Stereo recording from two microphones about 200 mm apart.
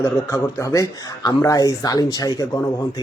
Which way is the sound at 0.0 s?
15° left (ahead or behind).